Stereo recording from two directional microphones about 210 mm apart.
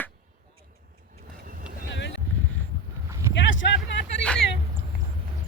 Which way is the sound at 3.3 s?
60° left (ahead or behind).